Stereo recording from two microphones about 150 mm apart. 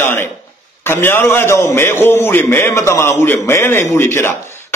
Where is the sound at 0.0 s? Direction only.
15° left (ahead or behind).